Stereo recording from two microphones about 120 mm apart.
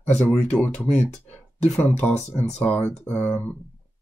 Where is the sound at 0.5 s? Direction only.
15° left (ahead or behind).